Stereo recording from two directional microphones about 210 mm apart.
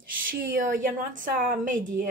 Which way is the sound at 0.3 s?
40° right (ahead or behind).